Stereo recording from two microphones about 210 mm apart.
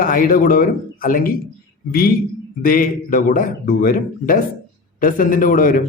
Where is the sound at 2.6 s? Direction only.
40° left (ahead or behind).